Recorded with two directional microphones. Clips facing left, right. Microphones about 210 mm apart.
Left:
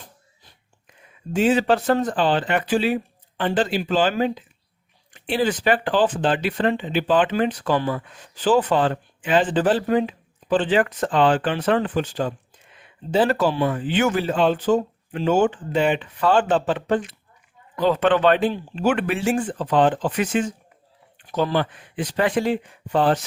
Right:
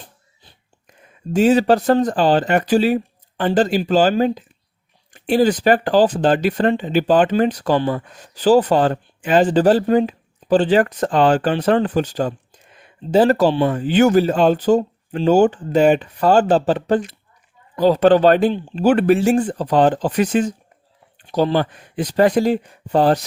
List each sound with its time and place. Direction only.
0.9 s speech: 40° right (ahead or behind)
13.7 s speech: 40° right (ahead or behind)